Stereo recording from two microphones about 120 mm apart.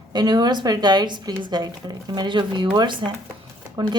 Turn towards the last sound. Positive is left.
turn(degrees=-40)  # may be behind; listen again after turning